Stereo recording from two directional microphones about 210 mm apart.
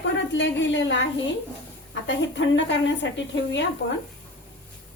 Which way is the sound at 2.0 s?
55° left (ahead or behind).